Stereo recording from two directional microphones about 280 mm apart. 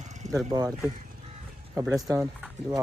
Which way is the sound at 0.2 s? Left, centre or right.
Right.